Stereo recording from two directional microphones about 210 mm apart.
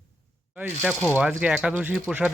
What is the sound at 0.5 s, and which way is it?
Speech, 10° right (ahead or behind).